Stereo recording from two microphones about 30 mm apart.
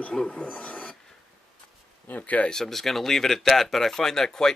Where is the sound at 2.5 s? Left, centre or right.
Centre.